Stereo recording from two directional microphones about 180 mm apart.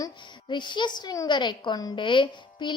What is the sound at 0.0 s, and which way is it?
A woman's voice, 25° left (ahead or behind).